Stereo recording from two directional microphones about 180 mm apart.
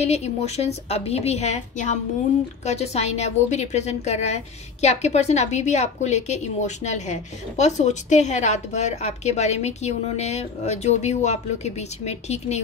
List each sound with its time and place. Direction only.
0.0 s a woman's voice: 35° left (ahead or behind)